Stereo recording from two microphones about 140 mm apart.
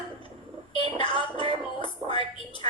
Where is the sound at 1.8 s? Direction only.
35° left (ahead or behind).